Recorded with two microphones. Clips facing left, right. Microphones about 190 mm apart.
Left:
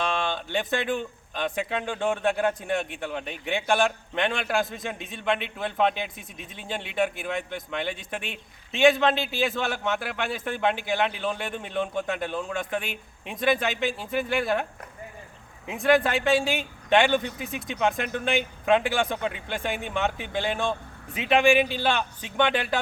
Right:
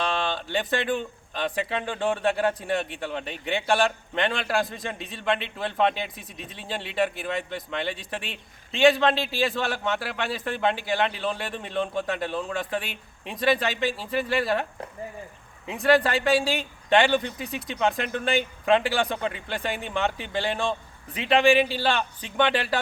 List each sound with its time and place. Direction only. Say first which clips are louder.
0.0 s speech: even; centre (ahead or behind)